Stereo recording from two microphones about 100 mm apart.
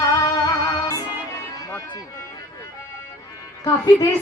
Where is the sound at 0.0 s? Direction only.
40° left (ahead or behind).